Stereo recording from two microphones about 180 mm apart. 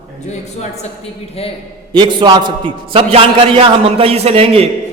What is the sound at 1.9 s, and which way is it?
A man's voice, 25° right (ahead or behind).